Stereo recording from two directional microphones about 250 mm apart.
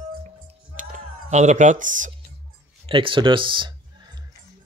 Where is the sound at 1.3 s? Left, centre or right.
Right.